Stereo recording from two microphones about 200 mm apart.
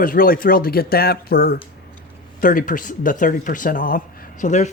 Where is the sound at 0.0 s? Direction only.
45° left (ahead or behind).